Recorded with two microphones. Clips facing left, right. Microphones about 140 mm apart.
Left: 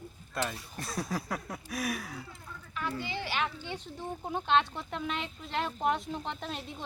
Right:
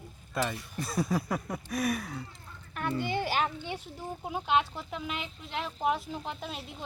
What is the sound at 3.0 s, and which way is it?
Speech, 50° right (ahead or behind).